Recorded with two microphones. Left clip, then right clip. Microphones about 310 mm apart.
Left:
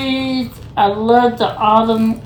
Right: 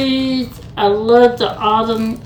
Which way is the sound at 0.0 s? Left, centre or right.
Centre.